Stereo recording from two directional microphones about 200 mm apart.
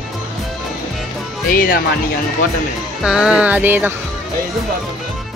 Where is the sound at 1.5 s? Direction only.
45° left (ahead or behind).